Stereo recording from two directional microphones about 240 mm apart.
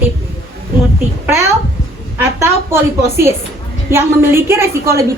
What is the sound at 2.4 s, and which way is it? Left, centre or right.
A woman's voice, centre.